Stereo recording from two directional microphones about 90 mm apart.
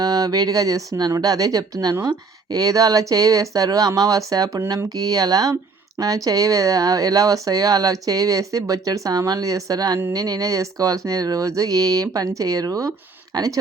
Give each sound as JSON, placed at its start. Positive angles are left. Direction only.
{"t": 0.0, "sound": "speech", "side_deg": -45}